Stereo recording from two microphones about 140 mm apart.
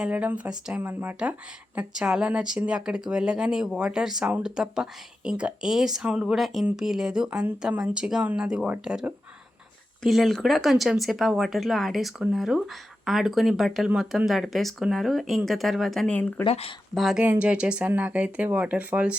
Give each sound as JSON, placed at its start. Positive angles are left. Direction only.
{"t": 0.0, "sound": "speech", "side_deg": -10}
{"t": 16.4, "sound": "speech", "side_deg": 40}
{"t": 16.9, "sound": "speech", "side_deg": 0}